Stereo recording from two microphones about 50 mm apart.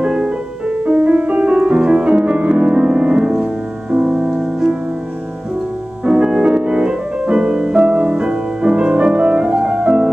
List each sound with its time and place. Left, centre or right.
0.0 s music: centre
0.8 s music: right
6.0 s music: centre